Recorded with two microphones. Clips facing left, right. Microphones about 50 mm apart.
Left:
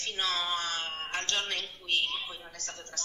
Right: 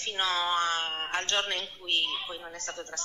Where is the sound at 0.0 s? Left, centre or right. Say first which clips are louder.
Right 3 dB; right.